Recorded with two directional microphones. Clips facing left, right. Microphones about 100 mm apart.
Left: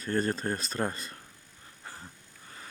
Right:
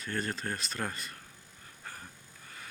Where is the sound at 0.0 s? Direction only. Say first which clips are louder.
Left 6 dB; 35° left (ahead or behind).